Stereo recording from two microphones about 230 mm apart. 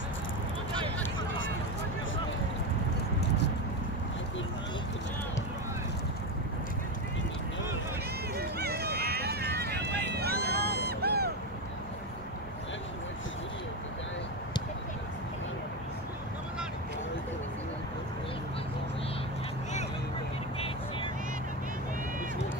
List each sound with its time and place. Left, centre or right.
8.4 s run: right
10.9 s vehicle: right